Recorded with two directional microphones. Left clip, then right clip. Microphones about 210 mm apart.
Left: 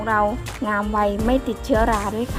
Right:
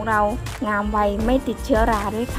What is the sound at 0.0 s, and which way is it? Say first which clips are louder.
Speech: even; centre (ahead or behind).